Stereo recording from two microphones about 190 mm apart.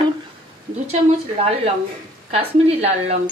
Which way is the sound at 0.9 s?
30° right (ahead or behind).